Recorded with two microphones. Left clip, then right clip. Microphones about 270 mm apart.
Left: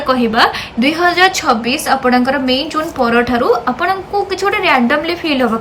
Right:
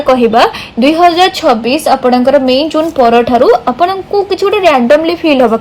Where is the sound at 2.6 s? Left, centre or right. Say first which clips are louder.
Right 7 dB; left.